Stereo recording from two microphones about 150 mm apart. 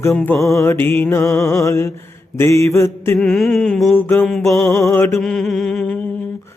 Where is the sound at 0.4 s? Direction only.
20° left (ahead or behind).